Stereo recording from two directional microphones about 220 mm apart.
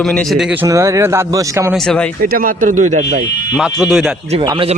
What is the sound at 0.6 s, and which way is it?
Speech, 15° right (ahead or behind).